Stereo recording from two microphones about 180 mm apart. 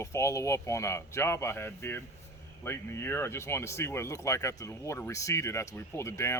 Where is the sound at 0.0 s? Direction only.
15° left (ahead or behind).